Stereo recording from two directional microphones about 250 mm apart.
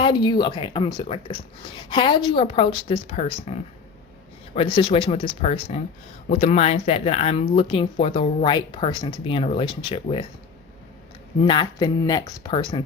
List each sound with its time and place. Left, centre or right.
0.0 s speech: centre
11.4 s speech: centre